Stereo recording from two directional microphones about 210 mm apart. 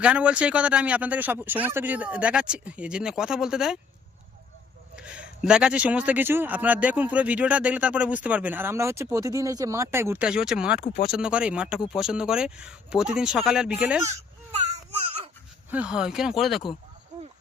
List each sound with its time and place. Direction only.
0.0 s speech: 5° right (ahead or behind)
4.9 s a man's voice: 5° right (ahead or behind)
14.1 s baby cry: 30° right (ahead or behind)
15.7 s speech: 5° right (ahead or behind)